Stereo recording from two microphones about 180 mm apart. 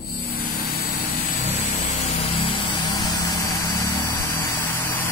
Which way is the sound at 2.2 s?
30° left (ahead or behind).